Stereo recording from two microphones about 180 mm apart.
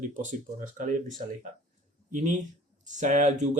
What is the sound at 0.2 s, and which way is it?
Speech, 45° right (ahead or behind).